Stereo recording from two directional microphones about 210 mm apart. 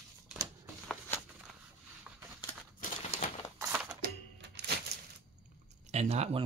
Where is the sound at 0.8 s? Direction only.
10° left (ahead or behind).